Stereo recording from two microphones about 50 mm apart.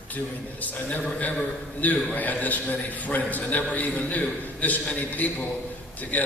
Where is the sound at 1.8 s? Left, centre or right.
Left.